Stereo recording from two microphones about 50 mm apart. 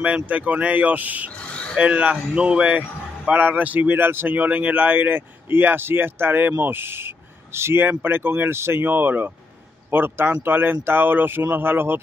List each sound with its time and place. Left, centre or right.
0.0 s a man's voice: right
3.9 s speech: right